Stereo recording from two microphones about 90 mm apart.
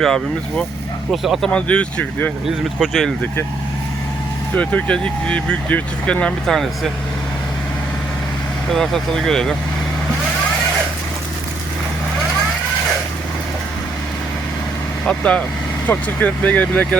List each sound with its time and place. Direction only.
0.0 s speech: 5° left (ahead or behind)
1.5 s speech: 15° left (ahead or behind)
2.7 s speech: centre (ahead or behind)
4.5 s speech: 15° left (ahead or behind)
8.7 s speech: 5° left (ahead or behind)
15.0 s speech: 10° left (ahead or behind)